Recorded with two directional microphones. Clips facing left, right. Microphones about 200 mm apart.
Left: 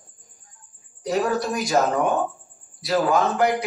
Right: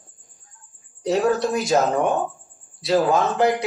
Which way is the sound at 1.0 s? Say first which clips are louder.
Right 3 dB; 25° right (ahead or behind).